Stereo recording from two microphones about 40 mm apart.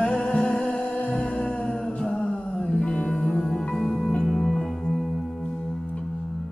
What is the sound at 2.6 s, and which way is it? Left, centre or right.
Music, left.